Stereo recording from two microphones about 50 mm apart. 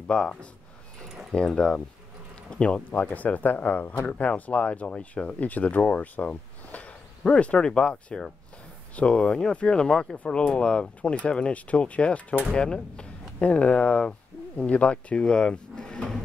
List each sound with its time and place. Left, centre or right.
0.0 s speech: centre
2.9 s speech: left; by 10.1 s centre
10.1 s speech: left; by 16.2 s centre